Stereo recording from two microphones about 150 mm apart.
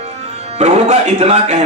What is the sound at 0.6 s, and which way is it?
Speech, 45° right (ahead or behind).